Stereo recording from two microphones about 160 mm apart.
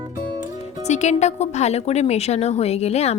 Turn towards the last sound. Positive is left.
turn(degrees=40)  # may be behind; listen again after turning